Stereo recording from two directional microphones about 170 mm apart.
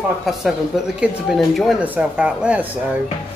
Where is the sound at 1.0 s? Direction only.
Centre (ahead or behind).